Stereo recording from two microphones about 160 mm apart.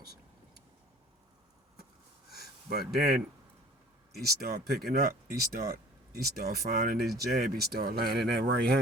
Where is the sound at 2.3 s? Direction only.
75° right (ahead or behind).